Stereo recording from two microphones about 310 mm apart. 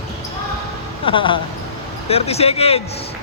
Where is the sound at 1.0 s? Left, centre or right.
Centre.